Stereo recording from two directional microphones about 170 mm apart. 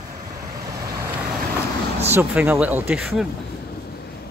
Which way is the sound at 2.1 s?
10° right (ahead or behind).